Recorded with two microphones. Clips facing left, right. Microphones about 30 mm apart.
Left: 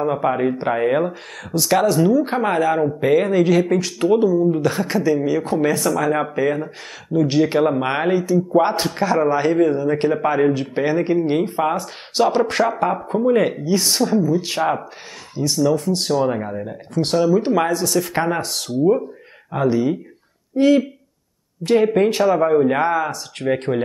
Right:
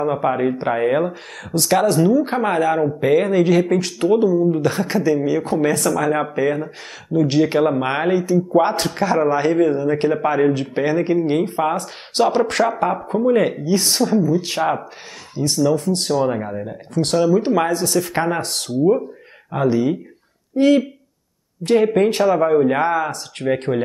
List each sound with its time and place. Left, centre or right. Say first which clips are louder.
0.0 s speech: even; centre
18.4 s speech: right 1 dB; centre